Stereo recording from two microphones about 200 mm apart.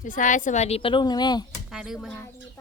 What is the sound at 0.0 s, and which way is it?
Speech, 40° left (ahead or behind).